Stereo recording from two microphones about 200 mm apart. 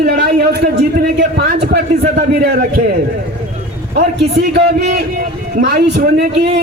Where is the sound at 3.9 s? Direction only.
50° right (ahead or behind).